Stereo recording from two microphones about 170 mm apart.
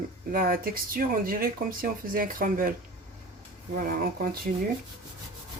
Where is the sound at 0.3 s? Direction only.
55° right (ahead or behind).